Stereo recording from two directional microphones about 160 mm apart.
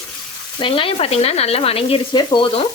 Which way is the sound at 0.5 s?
35° left (ahead or behind).